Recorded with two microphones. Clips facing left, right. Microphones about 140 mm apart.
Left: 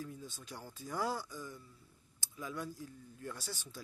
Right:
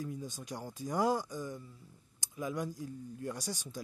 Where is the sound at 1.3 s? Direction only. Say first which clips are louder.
Right 6 dB; 45° right (ahead or behind).